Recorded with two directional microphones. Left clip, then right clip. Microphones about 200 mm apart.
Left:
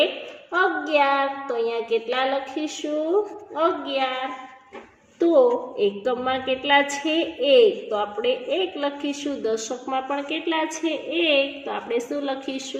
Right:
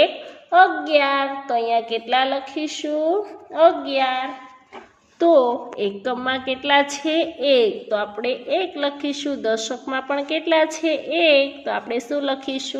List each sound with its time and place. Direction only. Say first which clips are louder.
0.5 s a woman's voice: right 6 dB; 35° right (ahead or behind)
5.2 s a woman's voice: right 2 dB; 35° right (ahead or behind)